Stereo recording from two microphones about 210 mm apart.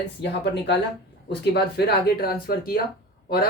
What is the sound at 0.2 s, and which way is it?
Speech, 25° left (ahead or behind).